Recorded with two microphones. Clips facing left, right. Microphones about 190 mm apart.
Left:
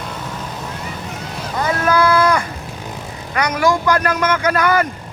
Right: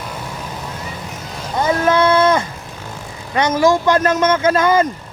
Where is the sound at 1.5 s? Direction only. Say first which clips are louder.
Right 2 dB; 25° right (ahead or behind).